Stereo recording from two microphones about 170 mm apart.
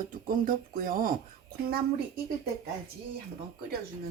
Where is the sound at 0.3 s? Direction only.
55° right (ahead or behind).